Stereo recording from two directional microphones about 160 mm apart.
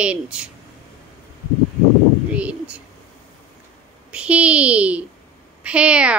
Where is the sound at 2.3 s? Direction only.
10° right (ahead or behind).